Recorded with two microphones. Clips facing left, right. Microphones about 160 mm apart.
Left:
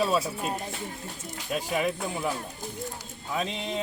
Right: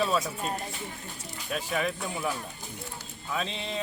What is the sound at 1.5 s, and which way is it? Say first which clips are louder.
Speech: left 2 dB; 10° left (ahead or behind).